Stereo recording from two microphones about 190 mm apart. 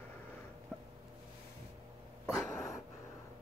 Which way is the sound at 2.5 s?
15° left (ahead or behind).